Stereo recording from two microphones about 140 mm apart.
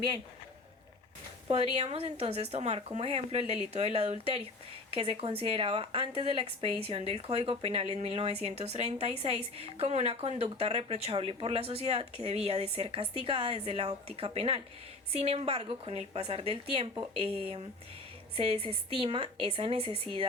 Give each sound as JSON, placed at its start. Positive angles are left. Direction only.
{"t": 1.5, "sound": "speech", "side_deg": -45}